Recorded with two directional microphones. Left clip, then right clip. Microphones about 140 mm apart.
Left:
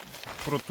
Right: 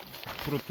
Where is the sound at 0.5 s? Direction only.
25° left (ahead or behind).